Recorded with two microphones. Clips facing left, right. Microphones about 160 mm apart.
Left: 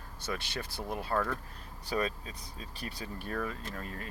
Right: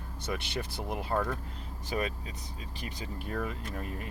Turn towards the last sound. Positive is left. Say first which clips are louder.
# right 3 dB
turn(degrees=-20)  # may be behind; listen again after turning